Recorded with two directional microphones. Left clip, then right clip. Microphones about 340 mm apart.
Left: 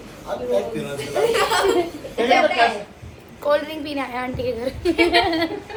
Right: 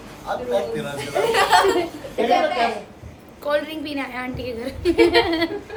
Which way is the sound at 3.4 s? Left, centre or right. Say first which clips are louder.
Left 2 dB; centre.